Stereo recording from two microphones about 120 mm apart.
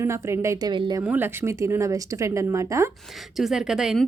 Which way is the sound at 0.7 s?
40° right (ahead or behind).